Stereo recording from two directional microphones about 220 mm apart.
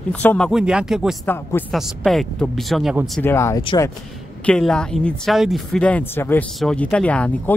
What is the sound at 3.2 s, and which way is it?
Speech, 10° left (ahead or behind).